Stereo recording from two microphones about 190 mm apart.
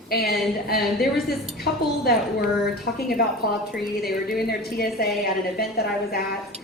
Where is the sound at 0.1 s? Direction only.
55° left (ahead or behind).